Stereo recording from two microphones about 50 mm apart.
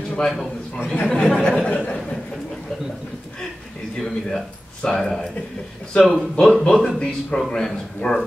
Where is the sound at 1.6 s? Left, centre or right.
Left.